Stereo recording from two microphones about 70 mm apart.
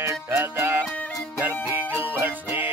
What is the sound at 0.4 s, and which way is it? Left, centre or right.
Music, right.